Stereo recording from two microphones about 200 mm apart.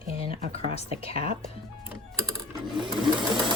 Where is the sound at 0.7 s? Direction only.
30° left (ahead or behind).